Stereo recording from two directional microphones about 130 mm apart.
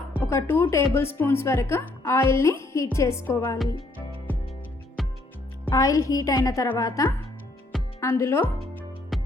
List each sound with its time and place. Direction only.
0.2 s a woman's voice: 15° left (ahead or behind)
5.0 s music: centre (ahead or behind)
5.6 s a woman's voice: 25° left (ahead or behind)
9.1 s music: centre (ahead or behind)